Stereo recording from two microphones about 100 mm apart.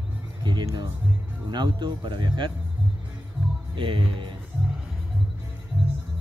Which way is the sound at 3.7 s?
60° right (ahead or behind).